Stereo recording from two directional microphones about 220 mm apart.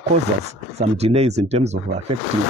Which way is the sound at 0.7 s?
30° right (ahead or behind).